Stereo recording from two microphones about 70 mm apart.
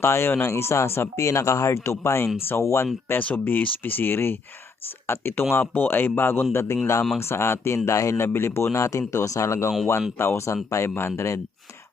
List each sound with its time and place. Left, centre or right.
0.0 s speech: left